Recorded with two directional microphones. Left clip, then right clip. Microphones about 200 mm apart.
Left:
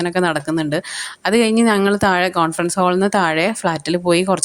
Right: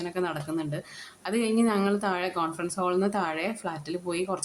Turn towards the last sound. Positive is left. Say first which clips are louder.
# left 14 dB
turn(degrees=40)  # may be behind; listen again after turning